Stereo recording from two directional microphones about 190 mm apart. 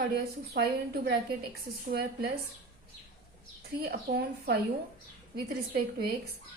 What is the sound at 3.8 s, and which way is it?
A woman's voice, 55° right (ahead or behind).